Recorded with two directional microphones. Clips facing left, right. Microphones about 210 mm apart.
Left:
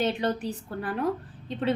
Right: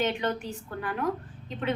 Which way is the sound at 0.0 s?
35° left (ahead or behind).